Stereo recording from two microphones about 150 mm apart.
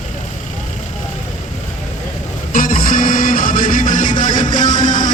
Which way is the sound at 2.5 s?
65° left (ahead or behind).